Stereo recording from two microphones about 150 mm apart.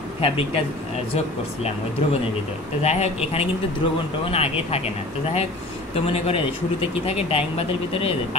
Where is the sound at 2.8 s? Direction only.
45° left (ahead or behind).